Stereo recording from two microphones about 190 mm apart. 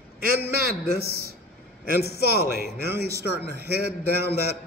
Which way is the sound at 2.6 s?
55° left (ahead or behind).